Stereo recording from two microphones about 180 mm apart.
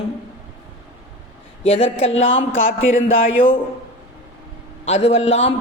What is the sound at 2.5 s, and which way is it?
Speech, 90° left.